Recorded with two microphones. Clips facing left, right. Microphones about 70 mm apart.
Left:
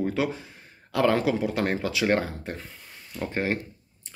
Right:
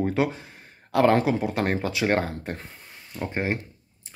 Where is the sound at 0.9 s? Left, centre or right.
Right.